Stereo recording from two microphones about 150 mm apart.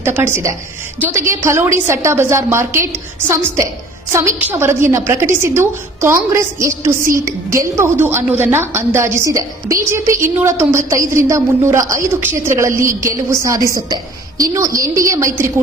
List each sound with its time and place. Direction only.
0.0 s a woman's voice: 15° right (ahead or behind)